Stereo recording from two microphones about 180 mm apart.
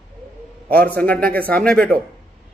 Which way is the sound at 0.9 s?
10° left (ahead or behind).